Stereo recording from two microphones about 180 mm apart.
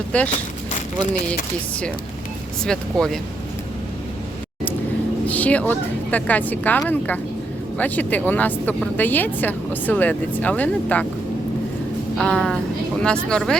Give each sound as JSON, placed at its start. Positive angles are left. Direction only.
{"t": 0.1, "sound": "speech", "side_deg": 5}
{"t": 0.7, "sound": "a sound", "side_deg": 45}
{"t": 2.6, "sound": "speech", "side_deg": 5}
{"t": 5.2, "sound": "speech", "side_deg": 10}
{"t": 12.1, "sound": "speech", "side_deg": 5}